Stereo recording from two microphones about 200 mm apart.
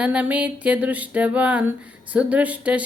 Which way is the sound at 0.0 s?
5° right (ahead or behind).